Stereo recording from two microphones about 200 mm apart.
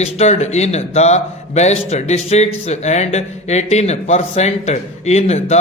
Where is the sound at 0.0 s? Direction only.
35° left (ahead or behind).